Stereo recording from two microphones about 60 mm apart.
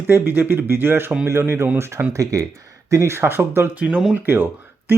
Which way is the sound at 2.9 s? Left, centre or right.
Right.